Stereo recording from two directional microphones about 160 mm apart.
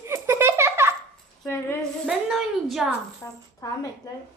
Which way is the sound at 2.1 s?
Centre (ahead or behind).